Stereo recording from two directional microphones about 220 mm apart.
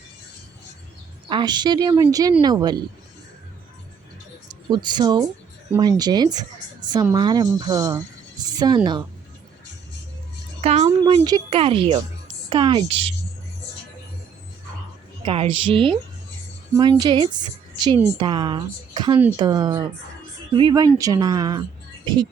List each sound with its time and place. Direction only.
1.3 s a woman's voice: 20° right (ahead or behind)
4.7 s a woman's voice: 20° right (ahead or behind)
10.6 s a sound: 30° right (ahead or behind)
10.8 s a woman's voice: 20° right (ahead or behind)
15.2 s a woman's voice: 25° right (ahead or behind)